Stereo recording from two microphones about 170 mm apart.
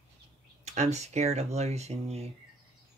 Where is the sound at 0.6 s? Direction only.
40° right (ahead or behind).